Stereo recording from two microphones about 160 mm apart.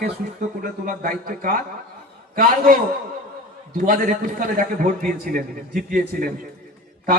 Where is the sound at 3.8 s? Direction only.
60° right (ahead or behind).